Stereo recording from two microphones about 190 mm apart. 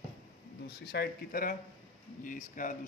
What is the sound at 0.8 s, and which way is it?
Speech, 50° left (ahead or behind).